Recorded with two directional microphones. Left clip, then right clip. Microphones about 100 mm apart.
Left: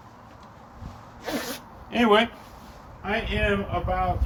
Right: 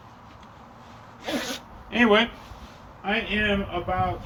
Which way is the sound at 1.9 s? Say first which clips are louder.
Even; 40° left (ahead or behind).